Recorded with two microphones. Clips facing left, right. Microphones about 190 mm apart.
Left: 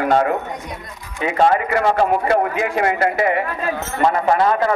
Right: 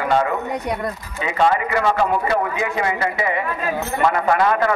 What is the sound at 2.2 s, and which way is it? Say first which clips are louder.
Speech: left 3 dB; 55° left (ahead or behind).